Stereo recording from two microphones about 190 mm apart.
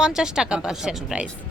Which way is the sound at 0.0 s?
5° right (ahead or behind).